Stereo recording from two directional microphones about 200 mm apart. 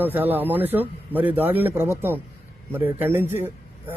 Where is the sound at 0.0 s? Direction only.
10° right (ahead or behind).